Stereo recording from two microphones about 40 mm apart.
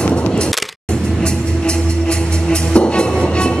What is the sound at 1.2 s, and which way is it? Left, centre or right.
Music, left.